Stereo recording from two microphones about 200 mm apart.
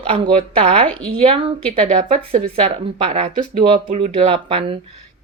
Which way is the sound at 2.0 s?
40° right (ahead or behind).